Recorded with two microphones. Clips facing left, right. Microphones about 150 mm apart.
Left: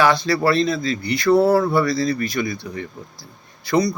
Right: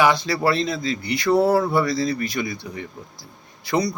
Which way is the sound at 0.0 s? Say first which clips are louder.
Left 2 dB; 15° right (ahead or behind).